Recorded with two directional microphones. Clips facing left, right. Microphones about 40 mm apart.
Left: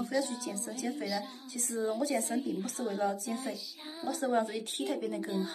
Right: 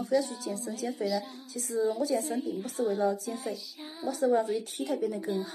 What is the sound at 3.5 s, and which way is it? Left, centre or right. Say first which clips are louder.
Music: right 2 dB; centre.